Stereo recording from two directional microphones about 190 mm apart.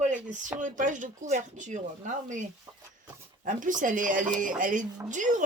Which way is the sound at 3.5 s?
45° right (ahead or behind).